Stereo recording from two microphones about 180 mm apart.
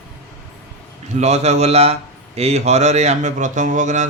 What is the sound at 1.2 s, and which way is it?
A man's voice, 40° right (ahead or behind).